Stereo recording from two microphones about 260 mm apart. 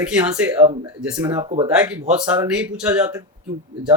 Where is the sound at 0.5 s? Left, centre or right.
Right.